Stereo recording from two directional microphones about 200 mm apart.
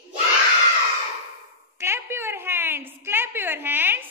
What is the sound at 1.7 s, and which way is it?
A woman's voice, 10° right (ahead or behind).